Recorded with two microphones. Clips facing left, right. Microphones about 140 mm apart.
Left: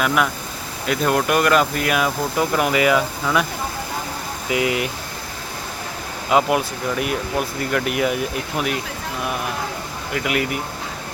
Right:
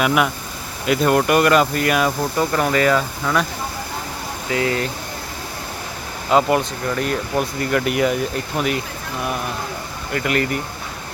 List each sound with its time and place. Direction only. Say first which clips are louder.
0.0 s speech: right 2 dB; 5° right (ahead or behind)
4.4 s speech: even; 15° left (ahead or behind)
6.3 s speech: right 1 dB; 5° left (ahead or behind)
10.1 s speech: right 2 dB; 5° left (ahead or behind)